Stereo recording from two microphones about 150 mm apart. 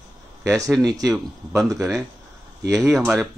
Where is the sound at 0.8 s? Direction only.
25° right (ahead or behind).